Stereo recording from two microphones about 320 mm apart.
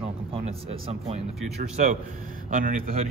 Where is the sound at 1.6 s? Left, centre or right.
Right.